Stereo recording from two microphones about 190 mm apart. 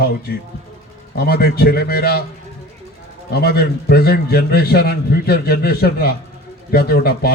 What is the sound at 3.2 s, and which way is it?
A man's voice, 60° left (ahead or behind).